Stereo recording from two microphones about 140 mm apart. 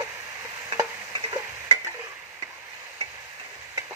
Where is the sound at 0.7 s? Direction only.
30° right (ahead or behind).